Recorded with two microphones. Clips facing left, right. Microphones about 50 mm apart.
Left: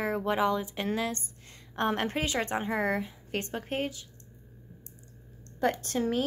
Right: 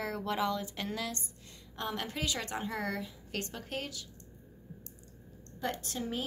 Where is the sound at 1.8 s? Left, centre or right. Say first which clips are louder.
Left 8 dB; left.